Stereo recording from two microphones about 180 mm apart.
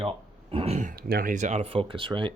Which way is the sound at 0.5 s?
35° right (ahead or behind).